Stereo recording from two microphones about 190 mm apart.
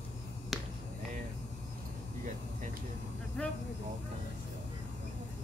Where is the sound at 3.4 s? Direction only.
5° left (ahead or behind).